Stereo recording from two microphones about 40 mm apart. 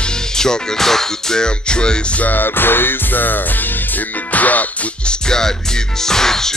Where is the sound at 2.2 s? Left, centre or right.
Left.